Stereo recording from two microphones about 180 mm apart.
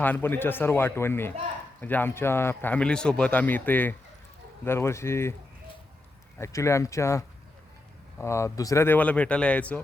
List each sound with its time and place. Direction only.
0.0 s speech: 10° left (ahead or behind)
6.4 s speech: 15° left (ahead or behind)